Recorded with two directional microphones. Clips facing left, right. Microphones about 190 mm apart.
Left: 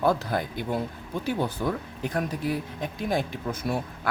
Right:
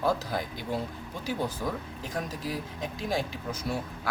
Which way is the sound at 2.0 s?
60° left (ahead or behind).